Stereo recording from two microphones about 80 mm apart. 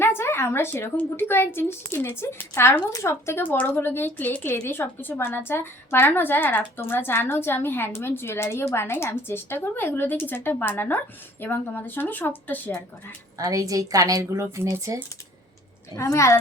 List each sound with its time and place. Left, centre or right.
0.0 s a sound: left
0.9 s a woman's voice: left
4.6 s a woman's voice: left
13.4 s speech: right
16.0 s speech: left